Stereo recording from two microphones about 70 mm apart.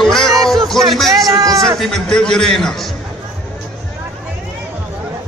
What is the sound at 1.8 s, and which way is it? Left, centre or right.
A man's voice, centre.